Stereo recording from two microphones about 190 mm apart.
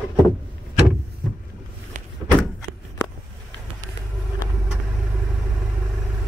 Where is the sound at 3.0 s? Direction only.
20° left (ahead or behind).